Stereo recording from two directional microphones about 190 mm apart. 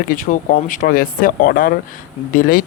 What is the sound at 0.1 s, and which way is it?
Speech, 45° left (ahead or behind).